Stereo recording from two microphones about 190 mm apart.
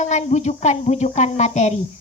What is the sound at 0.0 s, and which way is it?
A woman's voice, 40° left (ahead or behind).